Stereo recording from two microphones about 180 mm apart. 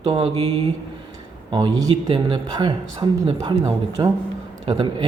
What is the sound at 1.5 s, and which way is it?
Speech, 25° right (ahead or behind).